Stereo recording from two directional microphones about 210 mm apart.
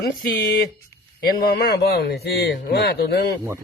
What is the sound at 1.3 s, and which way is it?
Speech, 45° left (ahead or behind).